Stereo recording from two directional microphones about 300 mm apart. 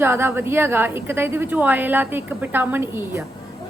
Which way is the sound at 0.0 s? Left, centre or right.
Centre.